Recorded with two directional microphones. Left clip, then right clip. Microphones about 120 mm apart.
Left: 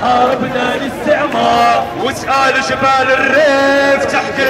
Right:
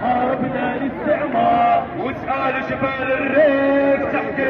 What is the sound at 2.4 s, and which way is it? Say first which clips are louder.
A man's voice: left 9 dB; 30° left (ahead or behind).